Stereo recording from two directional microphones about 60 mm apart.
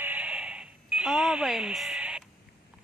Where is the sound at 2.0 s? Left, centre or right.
Centre.